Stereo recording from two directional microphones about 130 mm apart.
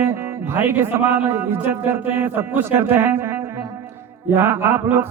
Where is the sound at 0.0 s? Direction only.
20° right (ahead or behind).